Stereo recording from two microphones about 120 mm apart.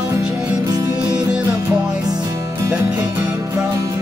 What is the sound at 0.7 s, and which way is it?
Music, 30° right (ahead or behind).